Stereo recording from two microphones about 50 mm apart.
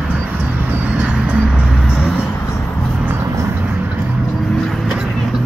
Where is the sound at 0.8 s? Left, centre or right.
Right.